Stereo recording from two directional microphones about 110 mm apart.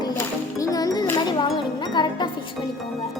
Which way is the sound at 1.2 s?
40° left (ahead or behind).